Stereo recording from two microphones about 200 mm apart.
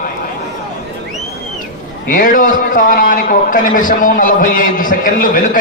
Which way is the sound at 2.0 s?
45° left (ahead or behind).